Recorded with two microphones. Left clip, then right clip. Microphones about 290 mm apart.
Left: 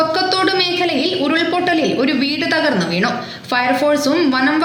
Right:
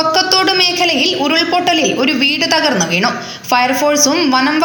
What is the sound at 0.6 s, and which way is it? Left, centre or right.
A woman's voice, centre.